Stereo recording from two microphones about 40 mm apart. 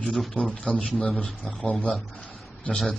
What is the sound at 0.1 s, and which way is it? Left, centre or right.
Speech, centre.